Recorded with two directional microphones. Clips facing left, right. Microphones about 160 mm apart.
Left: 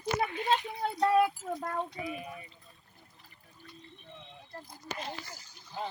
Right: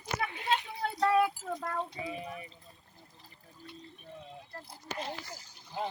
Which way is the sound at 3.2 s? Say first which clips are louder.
Right 5 dB; 30° right (ahead or behind).